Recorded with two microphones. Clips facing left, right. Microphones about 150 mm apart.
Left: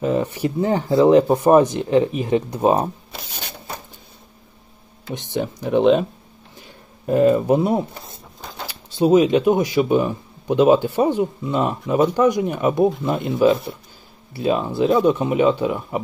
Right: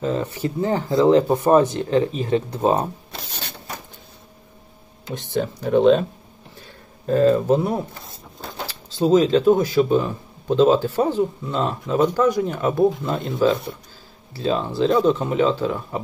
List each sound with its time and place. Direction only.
0.0 s speech: 15° left (ahead or behind)
5.3 s speech: 15° left (ahead or behind)
7.1 s speech: 15° left (ahead or behind)
14.3 s speech: 10° left (ahead or behind)